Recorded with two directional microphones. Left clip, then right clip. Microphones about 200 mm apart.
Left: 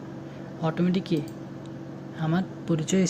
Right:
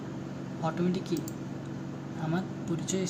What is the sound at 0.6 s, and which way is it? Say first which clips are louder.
Speech: left 4 dB; 30° left (ahead or behind).